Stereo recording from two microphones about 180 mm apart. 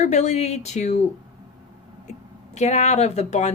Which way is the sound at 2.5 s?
40° left (ahead or behind).